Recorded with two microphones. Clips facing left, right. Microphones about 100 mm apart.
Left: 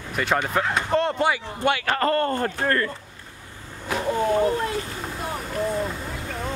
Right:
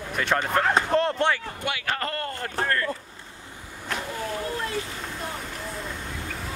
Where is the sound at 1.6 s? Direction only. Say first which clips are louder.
Left 9 dB; 60° left (ahead or behind).